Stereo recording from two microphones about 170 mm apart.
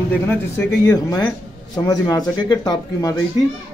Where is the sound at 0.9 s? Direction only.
20° left (ahead or behind).